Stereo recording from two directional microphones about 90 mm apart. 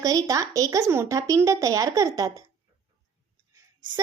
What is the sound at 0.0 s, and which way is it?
Speech, 40° right (ahead or behind).